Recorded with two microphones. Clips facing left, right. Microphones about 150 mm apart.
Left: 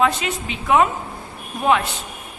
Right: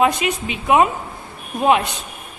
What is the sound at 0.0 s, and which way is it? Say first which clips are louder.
A woman's voice: right 2 dB; 15° right (ahead or behind).